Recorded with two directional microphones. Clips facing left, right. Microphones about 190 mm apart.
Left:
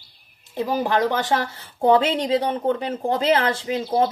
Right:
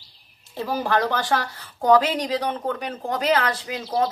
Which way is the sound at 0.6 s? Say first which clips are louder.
Left 2 dB; 15° left (ahead or behind).